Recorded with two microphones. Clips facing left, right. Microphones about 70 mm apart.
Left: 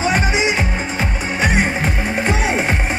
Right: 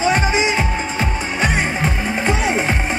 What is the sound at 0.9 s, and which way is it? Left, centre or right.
Music, centre.